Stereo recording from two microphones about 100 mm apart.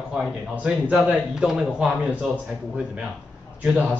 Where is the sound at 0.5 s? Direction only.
15° right (ahead or behind).